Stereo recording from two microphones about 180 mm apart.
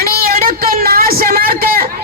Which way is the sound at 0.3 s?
55° right (ahead or behind).